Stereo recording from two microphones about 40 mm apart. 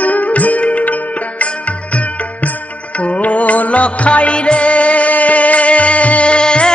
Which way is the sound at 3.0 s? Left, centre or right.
Left.